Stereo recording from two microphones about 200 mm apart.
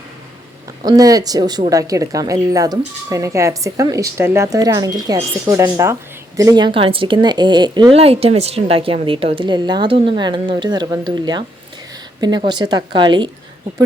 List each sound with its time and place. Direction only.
0.9 s speech: 20° right (ahead or behind)